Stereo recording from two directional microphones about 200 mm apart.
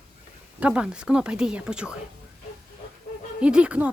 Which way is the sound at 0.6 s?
5° right (ahead or behind).